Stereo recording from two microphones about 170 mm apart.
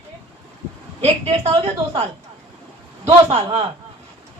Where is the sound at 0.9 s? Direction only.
35° right (ahead or behind).